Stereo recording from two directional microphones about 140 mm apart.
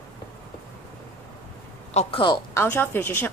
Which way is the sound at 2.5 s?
15° left (ahead or behind).